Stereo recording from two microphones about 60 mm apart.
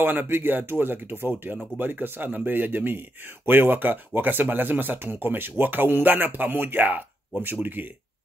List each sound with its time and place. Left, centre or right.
0.0 s speech: right